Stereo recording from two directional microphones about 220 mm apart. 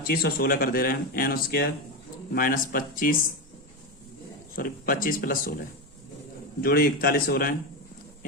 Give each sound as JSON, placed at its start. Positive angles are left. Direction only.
{"t": 0.1, "sound": "speech", "side_deg": 45}
{"t": 4.5, "sound": "speech", "side_deg": 40}
{"t": 6.6, "sound": "speech", "side_deg": 40}